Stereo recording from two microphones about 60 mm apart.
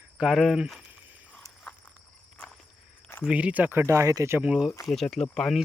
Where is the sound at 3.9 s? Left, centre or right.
Right.